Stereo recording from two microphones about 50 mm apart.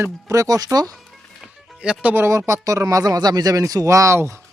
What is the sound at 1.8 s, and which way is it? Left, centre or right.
Speech, centre.